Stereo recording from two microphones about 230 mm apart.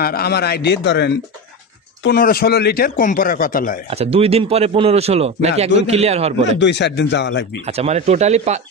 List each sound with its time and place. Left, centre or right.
0.0 s a man's voice: left
3.8 s speech: right
6.4 s a man's voice: left
7.6 s speech: right